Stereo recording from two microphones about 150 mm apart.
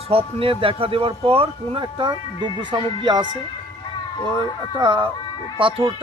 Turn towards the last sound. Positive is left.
turn(degrees=-35)  # may be behind; listen again after turning